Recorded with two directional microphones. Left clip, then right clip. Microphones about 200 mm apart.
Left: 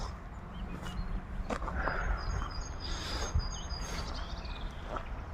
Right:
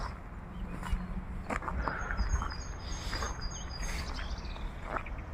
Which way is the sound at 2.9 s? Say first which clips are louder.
Right 1 dB; 30° left (ahead or behind).